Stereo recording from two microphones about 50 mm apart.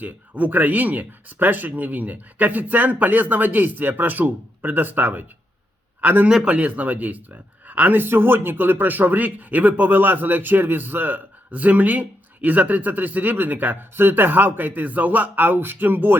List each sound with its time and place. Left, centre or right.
0.0 s a man's voice: right
6.2 s speech: centre; by 16.1 s right